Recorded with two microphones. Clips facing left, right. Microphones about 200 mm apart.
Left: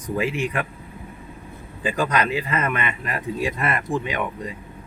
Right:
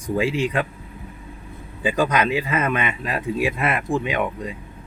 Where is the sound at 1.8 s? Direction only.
15° right (ahead or behind).